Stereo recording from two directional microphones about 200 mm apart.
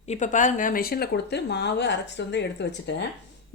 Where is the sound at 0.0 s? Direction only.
35° left (ahead or behind).